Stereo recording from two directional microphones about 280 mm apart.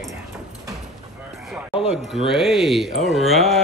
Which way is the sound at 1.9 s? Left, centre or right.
Centre.